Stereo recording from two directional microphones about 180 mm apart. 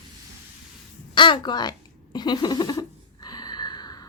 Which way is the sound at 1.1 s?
25° left (ahead or behind).